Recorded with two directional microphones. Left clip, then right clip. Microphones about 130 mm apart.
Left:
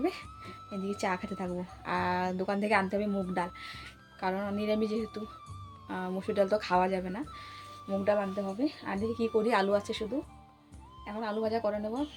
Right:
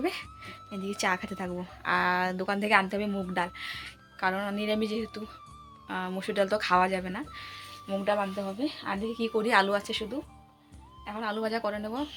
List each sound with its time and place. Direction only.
0.0 s a woman's voice: 5° left (ahead or behind)
8.5 s speech: 15° left (ahead or behind)
8.9 s a woman's voice: centre (ahead or behind)